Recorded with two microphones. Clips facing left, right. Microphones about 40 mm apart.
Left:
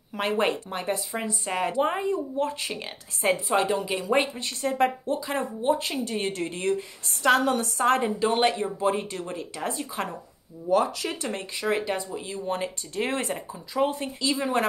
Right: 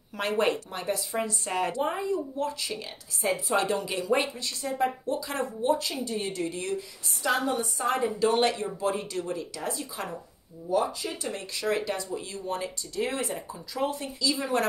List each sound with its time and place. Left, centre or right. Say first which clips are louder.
0.1 s speech: left 1 dB; centre
0.7 s a woman's voice: left 2 dB; left
1.1 s speech: even; centre
1.8 s a woman's voice: left 3 dB; left
3.7 s speech: left 3 dB; centre
4.1 s a woman's voice: left 2 dB; left
4.6 s speech: left 4 dB; left
5.0 s speech: left 2 dB; left
5.8 s a woman's voice: left 3 dB; left
8.3 s speech: left 2 dB; left
8.8 s a woman's voice: left 2 dB; left
10.7 s speech: left 4 dB; left
11.5 s a woman's voice: left 2 dB; left
13.5 s a woman's voice: left 4 dB; left